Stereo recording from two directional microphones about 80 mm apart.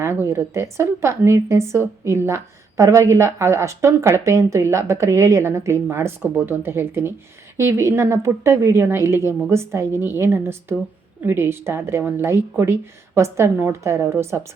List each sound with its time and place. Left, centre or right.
0.0 s a woman's voice: right